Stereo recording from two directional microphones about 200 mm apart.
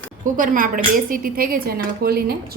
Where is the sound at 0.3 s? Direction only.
40° right (ahead or behind).